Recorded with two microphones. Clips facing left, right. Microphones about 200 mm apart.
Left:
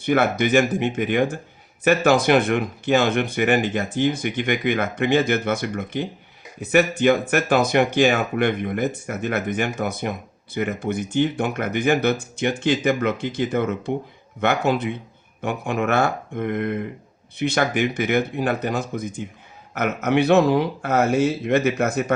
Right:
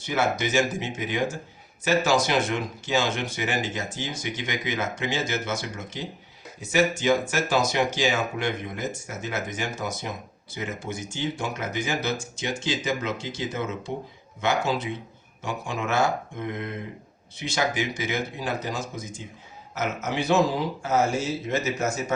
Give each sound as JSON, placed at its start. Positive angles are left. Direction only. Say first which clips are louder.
{"t": 0.0, "sound": "speech", "louder": "left 6 dB", "side_deg": 60}